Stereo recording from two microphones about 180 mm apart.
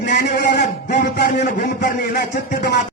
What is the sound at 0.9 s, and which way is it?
Speech, 65° left (ahead or behind).